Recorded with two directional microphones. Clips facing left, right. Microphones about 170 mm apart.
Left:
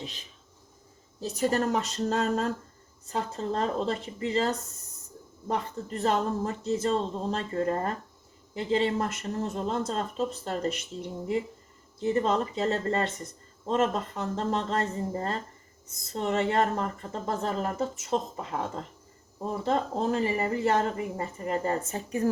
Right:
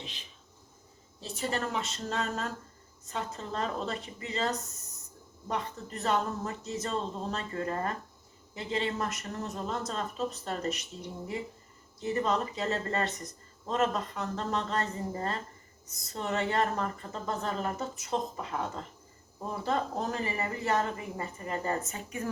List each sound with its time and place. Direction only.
1.2 s a woman's voice: 40° left (ahead or behind)
11.9 s a woman's voice: 30° left (ahead or behind)
19.6 s a woman's voice: 25° left (ahead or behind)